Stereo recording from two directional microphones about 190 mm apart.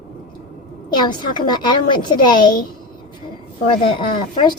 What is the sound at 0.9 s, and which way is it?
Speech, 20° left (ahead or behind).